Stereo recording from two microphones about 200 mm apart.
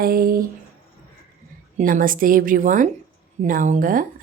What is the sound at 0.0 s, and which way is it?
Speech, 50° right (ahead or behind).